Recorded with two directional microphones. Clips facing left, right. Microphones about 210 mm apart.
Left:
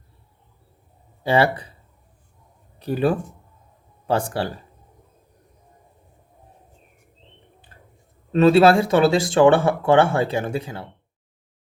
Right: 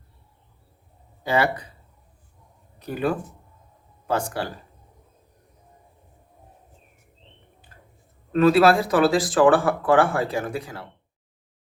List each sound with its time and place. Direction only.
1.2 s speech: 30° left (ahead or behind)
2.7 s speech: 30° left (ahead or behind)
8.3 s speech: 25° left (ahead or behind)